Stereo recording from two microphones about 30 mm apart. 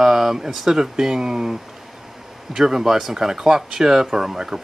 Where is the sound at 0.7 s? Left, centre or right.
Centre.